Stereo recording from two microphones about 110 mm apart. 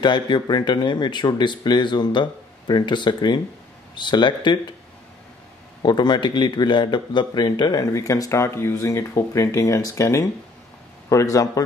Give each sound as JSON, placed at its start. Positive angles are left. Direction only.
{"t": 0.0, "sound": "speech", "side_deg": 45}
{"t": 5.8, "sound": "a man's voice", "side_deg": 40}